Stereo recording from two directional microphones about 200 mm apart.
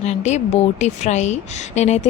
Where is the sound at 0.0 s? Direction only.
35° left (ahead or behind).